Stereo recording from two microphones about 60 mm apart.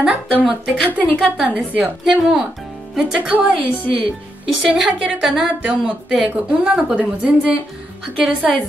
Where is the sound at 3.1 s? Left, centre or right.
Right.